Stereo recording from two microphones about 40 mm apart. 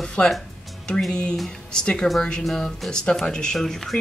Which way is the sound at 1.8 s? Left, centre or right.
Left.